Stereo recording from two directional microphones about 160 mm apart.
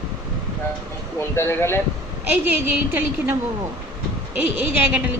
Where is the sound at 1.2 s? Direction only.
15° left (ahead or behind).